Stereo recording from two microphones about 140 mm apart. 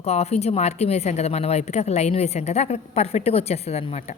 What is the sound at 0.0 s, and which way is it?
A woman's voice, 50° left (ahead or behind).